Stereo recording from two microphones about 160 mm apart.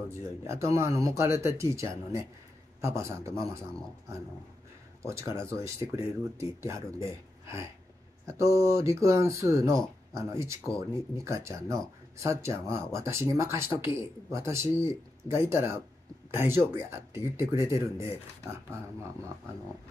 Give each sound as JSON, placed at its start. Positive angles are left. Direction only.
{"t": 0.5, "sound": "speech", "side_deg": -20}
{"t": 5.0, "sound": "speech", "side_deg": -20}